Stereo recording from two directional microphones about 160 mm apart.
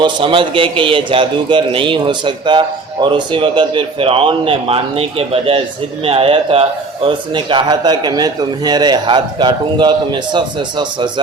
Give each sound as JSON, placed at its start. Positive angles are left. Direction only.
{"t": 0.0, "sound": "a man's voice", "side_deg": -30}